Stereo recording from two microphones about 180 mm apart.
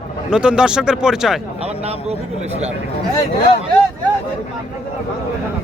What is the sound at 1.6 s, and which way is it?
Speech, 35° right (ahead or behind).